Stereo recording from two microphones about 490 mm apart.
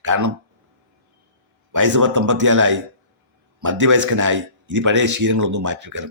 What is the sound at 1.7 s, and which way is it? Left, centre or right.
Speech, right.